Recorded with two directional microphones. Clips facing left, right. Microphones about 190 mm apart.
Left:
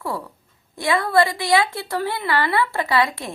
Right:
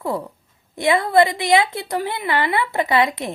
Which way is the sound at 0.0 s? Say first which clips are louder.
Right 4 dB; 20° right (ahead or behind).